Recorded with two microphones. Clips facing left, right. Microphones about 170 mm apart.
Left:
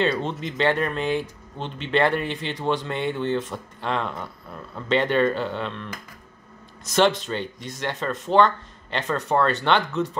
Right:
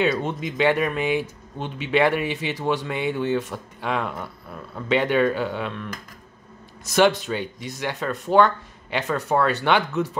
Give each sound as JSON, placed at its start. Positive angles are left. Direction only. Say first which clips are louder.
{"t": 0.0, "sound": "speech", "louder": "right 1 dB", "side_deg": -5}